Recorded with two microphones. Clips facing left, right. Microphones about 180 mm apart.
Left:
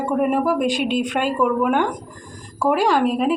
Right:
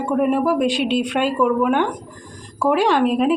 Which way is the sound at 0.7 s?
45° left (ahead or behind).